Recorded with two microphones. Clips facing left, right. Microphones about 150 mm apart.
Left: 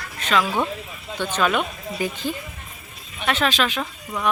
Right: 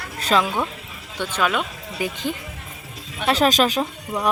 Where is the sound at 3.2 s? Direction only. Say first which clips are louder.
Right 4 dB; 40° right (ahead or behind).